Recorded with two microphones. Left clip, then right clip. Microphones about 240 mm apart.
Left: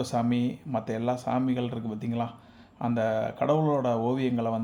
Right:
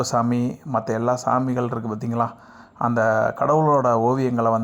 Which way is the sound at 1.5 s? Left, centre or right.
Right.